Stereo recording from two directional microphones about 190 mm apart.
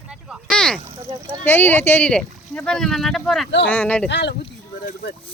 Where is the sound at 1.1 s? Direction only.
25° right (ahead or behind).